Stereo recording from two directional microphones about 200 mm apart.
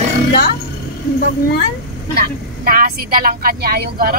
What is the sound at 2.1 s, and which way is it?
Speech, 45° right (ahead or behind).